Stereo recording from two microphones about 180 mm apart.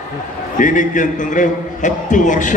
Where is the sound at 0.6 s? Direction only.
45° left (ahead or behind).